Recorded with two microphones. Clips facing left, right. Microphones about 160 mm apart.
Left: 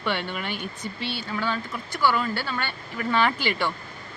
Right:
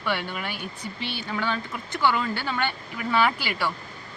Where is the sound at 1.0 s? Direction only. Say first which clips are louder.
Even; 15° right (ahead or behind).